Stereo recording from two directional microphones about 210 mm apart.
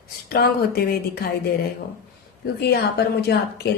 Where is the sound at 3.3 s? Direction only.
50° left (ahead or behind).